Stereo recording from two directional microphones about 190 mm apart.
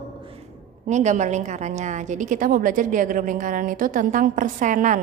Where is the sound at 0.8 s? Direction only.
40° right (ahead or behind).